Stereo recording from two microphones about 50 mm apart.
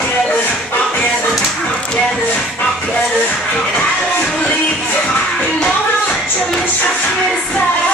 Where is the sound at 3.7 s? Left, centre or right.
Left.